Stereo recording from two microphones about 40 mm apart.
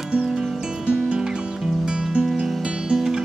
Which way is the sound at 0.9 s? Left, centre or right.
Right.